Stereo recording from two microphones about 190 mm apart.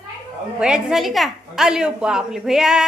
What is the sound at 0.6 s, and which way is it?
A woman's voice, 5° right (ahead or behind).